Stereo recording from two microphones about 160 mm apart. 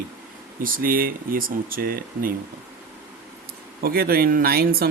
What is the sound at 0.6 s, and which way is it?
Speech, 65° right (ahead or behind).